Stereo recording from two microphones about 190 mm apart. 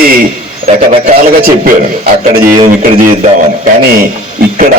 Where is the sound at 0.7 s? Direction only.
35° right (ahead or behind).